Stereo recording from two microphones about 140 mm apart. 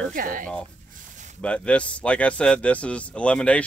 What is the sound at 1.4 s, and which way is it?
Speech, 10° left (ahead or behind).